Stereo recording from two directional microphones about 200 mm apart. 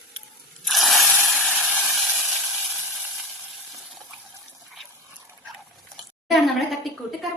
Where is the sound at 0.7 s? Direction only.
Centre (ahead or behind).